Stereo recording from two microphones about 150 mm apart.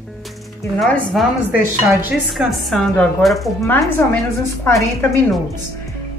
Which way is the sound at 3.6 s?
15° left (ahead or behind).